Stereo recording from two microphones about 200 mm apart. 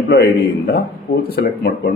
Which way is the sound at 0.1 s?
50° left (ahead or behind).